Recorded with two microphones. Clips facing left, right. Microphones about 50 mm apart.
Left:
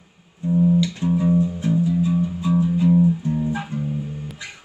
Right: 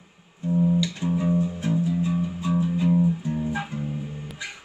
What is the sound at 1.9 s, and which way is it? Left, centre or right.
Music, right.